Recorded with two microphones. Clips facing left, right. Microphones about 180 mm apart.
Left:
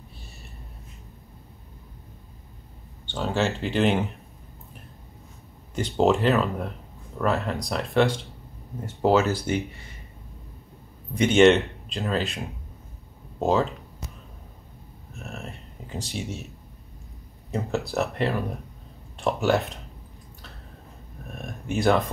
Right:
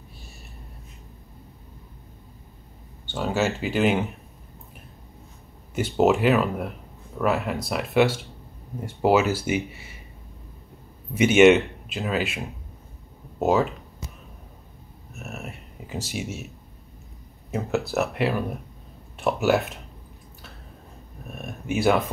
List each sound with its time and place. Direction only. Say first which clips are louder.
3.1 s speech: right 1 dB; 5° right (ahead or behind)
5.8 s speech: right 1 dB; 5° right (ahead or behind)
11.1 s speech: right 2 dB; 10° right (ahead or behind)
15.1 s a sound: right 1 dB; 5° right (ahead or behind)
17.5 s speech: right 2 dB; 5° right (ahead or behind)
21.4 s speech: right 2 dB; 5° right (ahead or behind)